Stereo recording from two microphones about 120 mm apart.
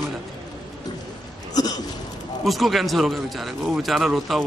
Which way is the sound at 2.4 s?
Centre (ahead or behind).